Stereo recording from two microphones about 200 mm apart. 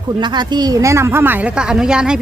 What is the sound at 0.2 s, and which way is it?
Speech, 20° right (ahead or behind).